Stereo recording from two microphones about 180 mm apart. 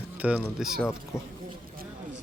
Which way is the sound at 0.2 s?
5° right (ahead or behind).